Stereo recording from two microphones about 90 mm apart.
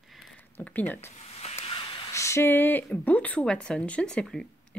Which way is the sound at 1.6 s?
75° left (ahead or behind).